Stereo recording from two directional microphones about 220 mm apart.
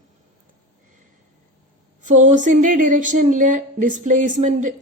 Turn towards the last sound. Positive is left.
turn(degrees=-35)  # may be behind; listen again after turning